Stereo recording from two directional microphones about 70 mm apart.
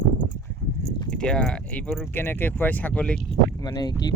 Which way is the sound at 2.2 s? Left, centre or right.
Left.